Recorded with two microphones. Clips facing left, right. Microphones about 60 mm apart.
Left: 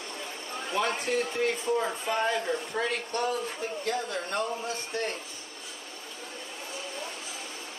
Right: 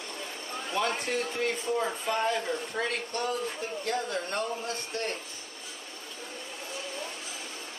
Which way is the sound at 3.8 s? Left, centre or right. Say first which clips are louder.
Right 1 dB; right.